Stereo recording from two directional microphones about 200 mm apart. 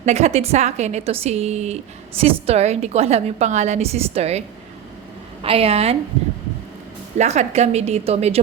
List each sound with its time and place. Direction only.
0.0 s a woman's voice: 35° right (ahead or behind)
7.2 s speech: 35° right (ahead or behind)